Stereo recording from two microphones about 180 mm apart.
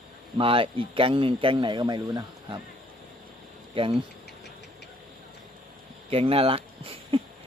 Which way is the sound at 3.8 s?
30° right (ahead or behind).